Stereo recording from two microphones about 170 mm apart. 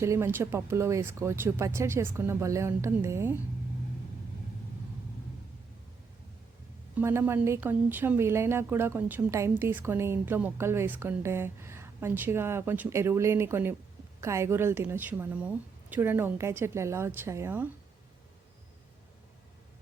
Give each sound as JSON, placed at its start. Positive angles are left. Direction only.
{"t": 0.0, "sound": "speech", "side_deg": -15}
{"t": 6.9, "sound": "speech", "side_deg": -15}